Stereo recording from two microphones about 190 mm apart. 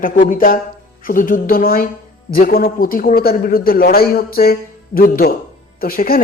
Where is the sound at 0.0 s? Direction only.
45° left (ahead or behind).